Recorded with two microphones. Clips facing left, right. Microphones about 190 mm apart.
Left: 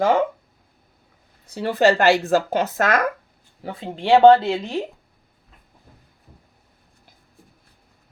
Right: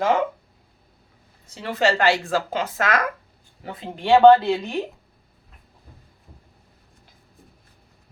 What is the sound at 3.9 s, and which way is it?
Speech, 25° left (ahead or behind).